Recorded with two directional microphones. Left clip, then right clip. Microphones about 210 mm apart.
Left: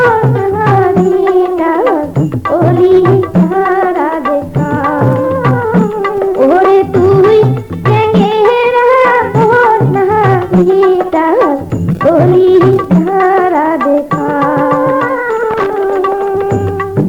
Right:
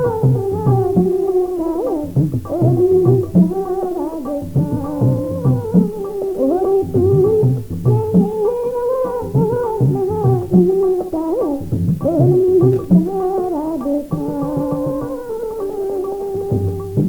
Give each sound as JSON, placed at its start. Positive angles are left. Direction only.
{"t": 0.6, "sound": "music", "side_deg": -30}
{"t": 5.0, "sound": "music", "side_deg": -25}